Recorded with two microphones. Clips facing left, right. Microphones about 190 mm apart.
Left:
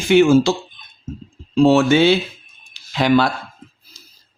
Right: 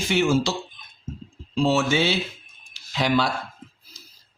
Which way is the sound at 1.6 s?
60° left (ahead or behind).